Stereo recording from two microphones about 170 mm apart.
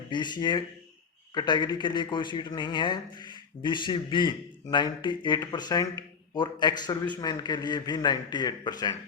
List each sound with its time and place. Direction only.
0.1 s speech: 25° left (ahead or behind)